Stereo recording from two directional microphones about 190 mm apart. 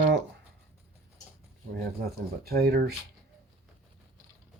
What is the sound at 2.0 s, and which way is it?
Speech, 55° right (ahead or behind).